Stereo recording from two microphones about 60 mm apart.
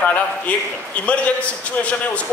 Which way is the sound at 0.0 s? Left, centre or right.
Left.